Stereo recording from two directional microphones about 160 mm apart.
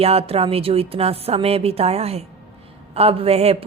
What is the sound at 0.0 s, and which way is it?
A woman's voice, 40° right (ahead or behind).